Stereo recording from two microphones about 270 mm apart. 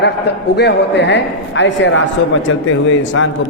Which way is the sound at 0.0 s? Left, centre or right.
Left.